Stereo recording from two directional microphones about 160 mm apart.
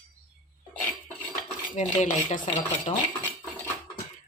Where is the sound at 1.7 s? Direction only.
50° left (ahead or behind).